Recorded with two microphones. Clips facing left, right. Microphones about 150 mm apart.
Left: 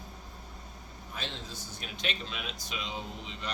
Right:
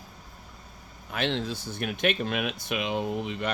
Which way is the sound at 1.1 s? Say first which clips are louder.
Right 13 dB; 70° right (ahead or behind).